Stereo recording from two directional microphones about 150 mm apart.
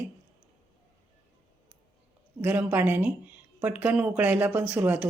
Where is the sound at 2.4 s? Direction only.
10° right (ahead or behind).